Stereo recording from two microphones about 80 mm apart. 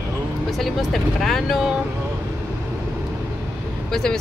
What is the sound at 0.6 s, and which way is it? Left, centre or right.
Speech, centre.